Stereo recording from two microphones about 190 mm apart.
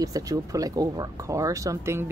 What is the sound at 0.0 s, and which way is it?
Speech, 20° right (ahead or behind).